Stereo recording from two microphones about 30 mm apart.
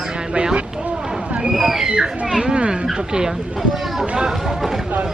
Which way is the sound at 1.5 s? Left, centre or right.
Centre.